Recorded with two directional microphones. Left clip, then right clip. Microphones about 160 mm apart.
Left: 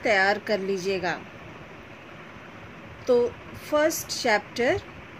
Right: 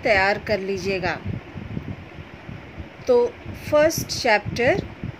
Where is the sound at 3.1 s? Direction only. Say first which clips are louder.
Right 4 dB; 10° right (ahead or behind).